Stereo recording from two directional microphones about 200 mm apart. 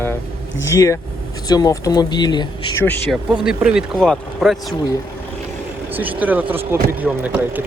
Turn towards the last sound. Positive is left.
turn(degrees=-10)  # may be behind; listen again after turning